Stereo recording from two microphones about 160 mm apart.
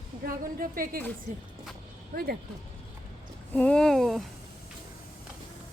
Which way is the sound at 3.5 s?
5° left (ahead or behind).